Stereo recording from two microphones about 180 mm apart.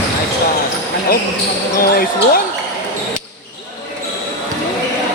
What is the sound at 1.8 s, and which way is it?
Speech, 55° left (ahead or behind).